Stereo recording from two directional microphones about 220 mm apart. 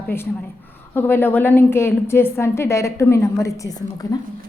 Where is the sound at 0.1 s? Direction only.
10° left (ahead or behind).